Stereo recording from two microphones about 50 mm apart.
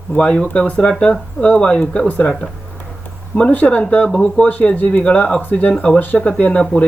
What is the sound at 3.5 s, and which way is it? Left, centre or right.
Speech, left.